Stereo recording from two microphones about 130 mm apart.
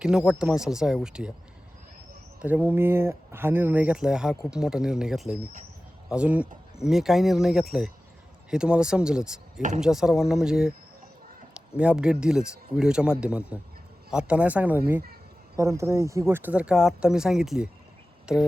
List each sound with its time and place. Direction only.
0.0 s speech: 5° right (ahead or behind)
2.4 s speech: 15° right (ahead or behind)
9.6 s speech: 75° right (ahead or behind)
9.8 s speech: 5° right (ahead or behind)
11.8 s speech: 10° right (ahead or behind)